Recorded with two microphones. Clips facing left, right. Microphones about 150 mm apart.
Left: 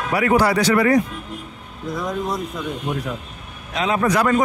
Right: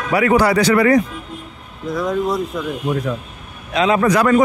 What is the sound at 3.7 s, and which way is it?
Speech, 90° right.